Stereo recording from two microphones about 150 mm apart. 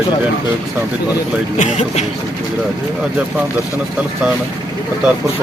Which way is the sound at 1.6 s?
45° left (ahead or behind).